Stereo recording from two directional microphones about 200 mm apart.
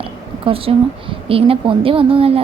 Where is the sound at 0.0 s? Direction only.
25° right (ahead or behind).